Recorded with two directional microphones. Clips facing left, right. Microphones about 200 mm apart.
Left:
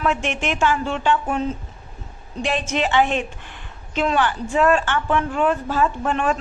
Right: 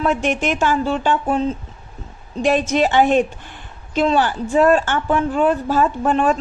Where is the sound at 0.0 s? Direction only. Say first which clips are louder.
Right 4 dB; 40° right (ahead or behind).